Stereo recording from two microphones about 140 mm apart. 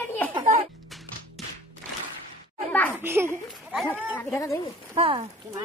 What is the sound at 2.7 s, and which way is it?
Speech, 10° left (ahead or behind).